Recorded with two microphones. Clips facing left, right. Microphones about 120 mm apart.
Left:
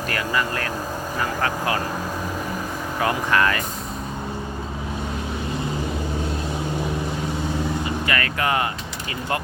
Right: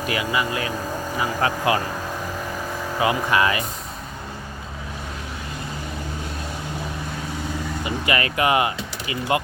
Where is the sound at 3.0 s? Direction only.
10° right (ahead or behind).